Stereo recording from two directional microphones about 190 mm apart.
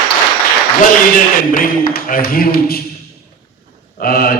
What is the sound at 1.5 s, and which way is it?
Speech, 45° left (ahead or behind).